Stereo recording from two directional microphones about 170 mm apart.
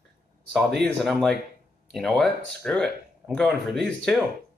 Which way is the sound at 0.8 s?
Centre (ahead or behind).